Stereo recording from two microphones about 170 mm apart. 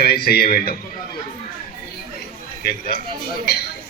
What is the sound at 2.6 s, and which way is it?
Speech, 60° left (ahead or behind).